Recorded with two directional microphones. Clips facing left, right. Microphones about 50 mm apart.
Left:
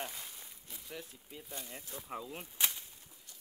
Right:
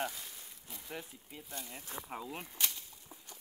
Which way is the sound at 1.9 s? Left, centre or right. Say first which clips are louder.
Right 4 dB; right.